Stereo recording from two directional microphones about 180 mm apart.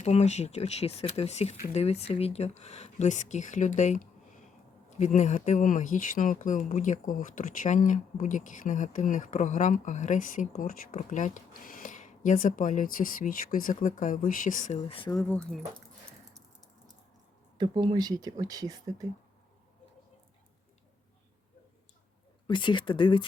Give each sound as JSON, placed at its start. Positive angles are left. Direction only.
{"t": 0.0, "sound": "speech", "side_deg": 40}
{"t": 15.1, "sound": "speech", "side_deg": 15}
{"t": 17.6, "sound": "speech", "side_deg": -25}
{"t": 22.4, "sound": "speech", "side_deg": 25}